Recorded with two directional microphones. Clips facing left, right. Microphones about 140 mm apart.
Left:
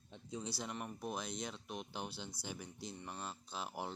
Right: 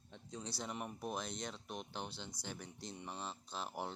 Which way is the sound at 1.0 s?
Centre (ahead or behind).